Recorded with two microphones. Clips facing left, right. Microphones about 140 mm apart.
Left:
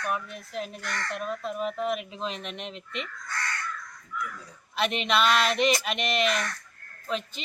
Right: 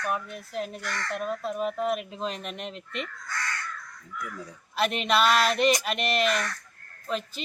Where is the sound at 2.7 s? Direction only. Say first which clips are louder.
Right 1 dB; 45° right (ahead or behind).